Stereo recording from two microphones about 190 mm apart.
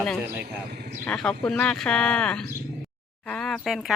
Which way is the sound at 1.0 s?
5° left (ahead or behind).